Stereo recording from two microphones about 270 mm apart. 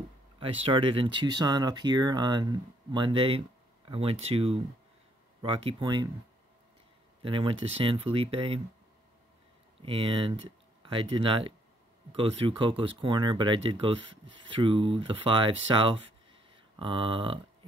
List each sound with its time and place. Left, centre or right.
0.4 s speech: centre
7.2 s speech: centre
9.8 s speech: centre